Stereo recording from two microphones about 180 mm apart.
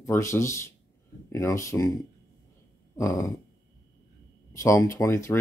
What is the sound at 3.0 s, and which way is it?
Speech, 15° left (ahead or behind).